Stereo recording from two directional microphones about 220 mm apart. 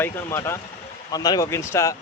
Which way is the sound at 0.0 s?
10° left (ahead or behind).